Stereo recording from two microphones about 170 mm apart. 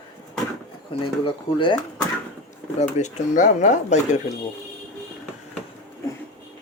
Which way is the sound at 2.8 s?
45° left (ahead or behind).